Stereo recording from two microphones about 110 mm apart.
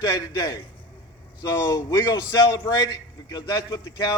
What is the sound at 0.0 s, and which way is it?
Speech, 30° left (ahead or behind).